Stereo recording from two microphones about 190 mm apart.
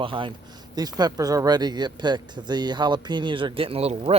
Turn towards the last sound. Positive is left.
turn(degrees=-30)  # may be behind; listen again after turning